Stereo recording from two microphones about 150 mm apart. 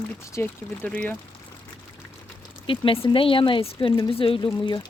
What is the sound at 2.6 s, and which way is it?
Speech, 35° left (ahead or behind).